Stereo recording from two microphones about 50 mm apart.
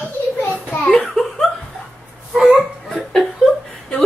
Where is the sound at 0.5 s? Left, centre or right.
Left.